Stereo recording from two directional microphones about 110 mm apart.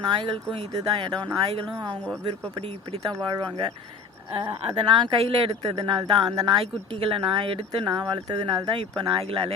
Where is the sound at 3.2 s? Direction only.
45° right (ahead or behind).